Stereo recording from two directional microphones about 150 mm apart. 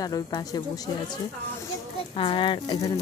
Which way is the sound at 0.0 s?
25° left (ahead or behind).